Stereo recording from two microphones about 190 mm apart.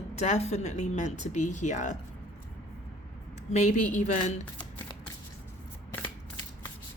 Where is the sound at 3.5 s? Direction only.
40° left (ahead or behind).